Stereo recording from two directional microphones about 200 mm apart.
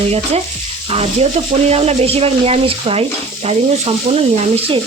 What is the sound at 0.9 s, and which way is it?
Speech, 30° right (ahead or behind).